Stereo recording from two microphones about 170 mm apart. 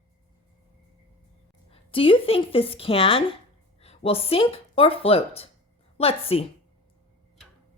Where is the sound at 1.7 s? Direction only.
30° left (ahead or behind).